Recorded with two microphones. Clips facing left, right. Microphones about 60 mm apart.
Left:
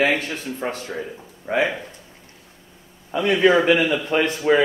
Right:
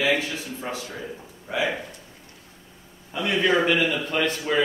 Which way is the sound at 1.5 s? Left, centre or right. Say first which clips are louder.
Left 6 dB; left.